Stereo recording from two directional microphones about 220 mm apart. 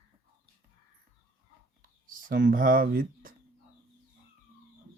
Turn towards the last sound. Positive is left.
turn(degrees=-40)  # may be behind; listen again after turning